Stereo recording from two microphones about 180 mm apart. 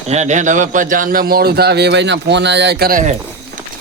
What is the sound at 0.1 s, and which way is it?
A man's voice, 40° right (ahead or behind).